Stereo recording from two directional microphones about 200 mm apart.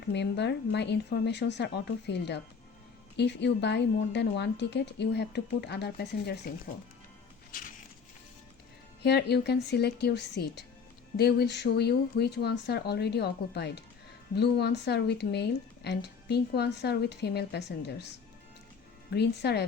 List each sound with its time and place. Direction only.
0.1 s speech: 60° left (ahead or behind)
9.0 s speech: 55° left (ahead or behind)
19.1 s speech: 55° left (ahead or behind)